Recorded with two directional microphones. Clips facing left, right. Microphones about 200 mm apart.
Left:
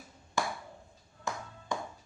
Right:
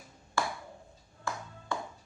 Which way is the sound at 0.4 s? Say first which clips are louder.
Even; 15° left (ahead or behind).